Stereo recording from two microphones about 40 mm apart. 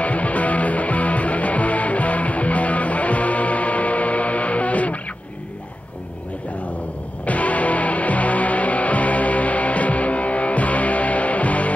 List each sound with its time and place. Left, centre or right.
0.0 s music: left
7.2 s music: left